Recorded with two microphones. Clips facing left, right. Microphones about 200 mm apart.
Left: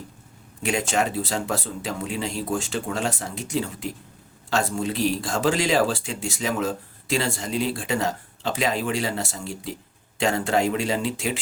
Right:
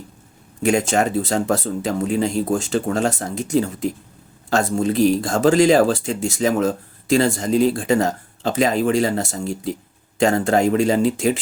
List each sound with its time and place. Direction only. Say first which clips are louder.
0.6 s speech: right 6 dB; 45° right (ahead or behind)